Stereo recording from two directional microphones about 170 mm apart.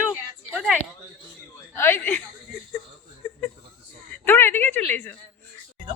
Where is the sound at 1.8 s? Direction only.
15° left (ahead or behind).